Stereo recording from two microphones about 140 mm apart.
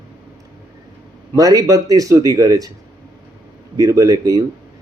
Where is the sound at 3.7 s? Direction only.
25° right (ahead or behind).